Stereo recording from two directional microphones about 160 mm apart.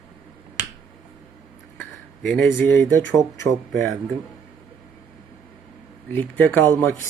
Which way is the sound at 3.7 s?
Centre (ahead or behind).